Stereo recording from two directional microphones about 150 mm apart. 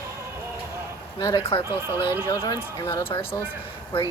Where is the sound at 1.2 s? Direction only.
25° left (ahead or behind).